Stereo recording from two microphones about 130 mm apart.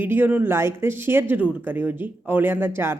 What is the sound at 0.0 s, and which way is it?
Speech, 15° right (ahead or behind).